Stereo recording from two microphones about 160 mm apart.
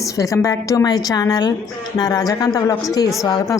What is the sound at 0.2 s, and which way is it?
A woman's voice, 20° left (ahead or behind).